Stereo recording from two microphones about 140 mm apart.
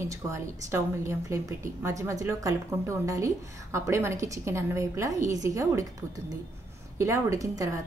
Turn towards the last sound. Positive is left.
turn(degrees=-25)  # may be behind; listen again after turning